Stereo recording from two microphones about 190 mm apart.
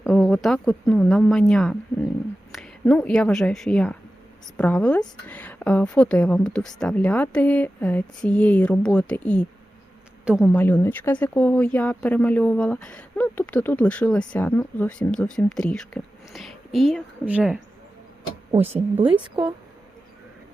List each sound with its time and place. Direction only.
0.0 s a woman's voice: centre (ahead or behind)
10.2 s speech: 5° right (ahead or behind)
10.5 s speech: 10° left (ahead or behind); by 17.6 s 5° right (ahead or behind)
18.9 s speech: 25° right (ahead or behind)